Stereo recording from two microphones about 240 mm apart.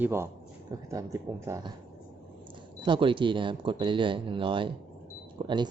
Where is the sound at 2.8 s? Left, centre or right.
Right.